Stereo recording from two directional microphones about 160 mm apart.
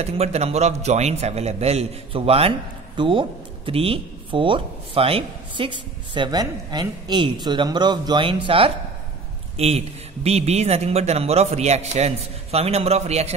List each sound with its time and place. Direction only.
0.0 s speech: 40° right (ahead or behind)